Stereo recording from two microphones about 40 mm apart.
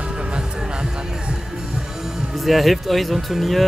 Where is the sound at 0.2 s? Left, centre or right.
Right.